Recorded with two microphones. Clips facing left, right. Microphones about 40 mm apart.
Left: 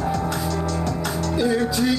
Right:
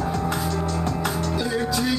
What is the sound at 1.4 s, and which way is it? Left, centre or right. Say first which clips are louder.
Music: left 5 dB; centre.